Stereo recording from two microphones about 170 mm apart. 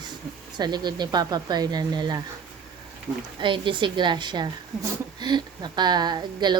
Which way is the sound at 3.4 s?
30° right (ahead or behind).